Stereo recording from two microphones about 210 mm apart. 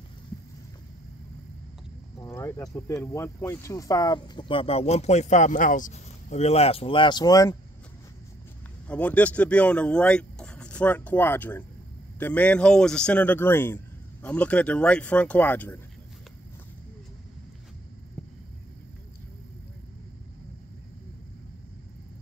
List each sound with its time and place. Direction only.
2.1 s speech: 10° left (ahead or behind)
8.8 s speech: 5° left (ahead or behind)
18.2 s a sound: 5° left (ahead or behind)